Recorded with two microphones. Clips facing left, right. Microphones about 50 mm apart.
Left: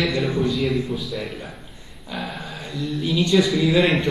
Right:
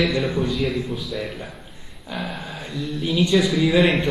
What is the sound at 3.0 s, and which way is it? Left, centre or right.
Speech, centre.